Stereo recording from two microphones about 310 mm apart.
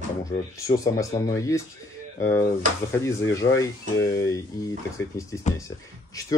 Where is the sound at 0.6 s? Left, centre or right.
Centre.